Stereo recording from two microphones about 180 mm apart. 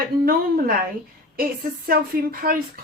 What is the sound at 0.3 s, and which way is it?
Speech, 55° right (ahead or behind).